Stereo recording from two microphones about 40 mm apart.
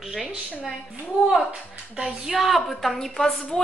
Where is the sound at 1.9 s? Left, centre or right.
Centre.